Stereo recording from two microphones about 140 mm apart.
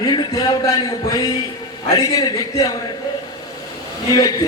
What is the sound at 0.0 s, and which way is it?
Music, 30° left (ahead or behind).